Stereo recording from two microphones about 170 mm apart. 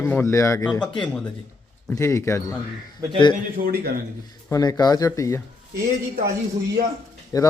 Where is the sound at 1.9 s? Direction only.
15° left (ahead or behind).